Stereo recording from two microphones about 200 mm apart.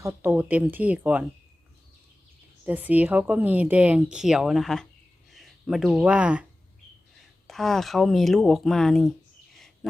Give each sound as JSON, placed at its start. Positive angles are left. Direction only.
{"t": 0.0, "sound": "a woman's voice", "side_deg": -10}
{"t": 2.6, "sound": "a woman's voice", "side_deg": -10}
{"t": 7.4, "sound": "speech", "side_deg": 0}